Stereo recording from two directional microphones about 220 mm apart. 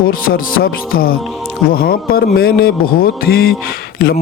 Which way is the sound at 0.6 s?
45° left (ahead or behind).